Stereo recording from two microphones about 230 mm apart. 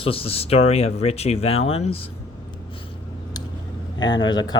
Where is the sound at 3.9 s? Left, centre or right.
Centre.